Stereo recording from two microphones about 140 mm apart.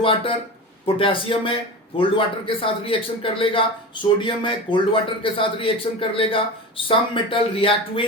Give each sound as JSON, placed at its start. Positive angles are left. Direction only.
{"t": 0.0, "sound": "a man's voice", "side_deg": 40}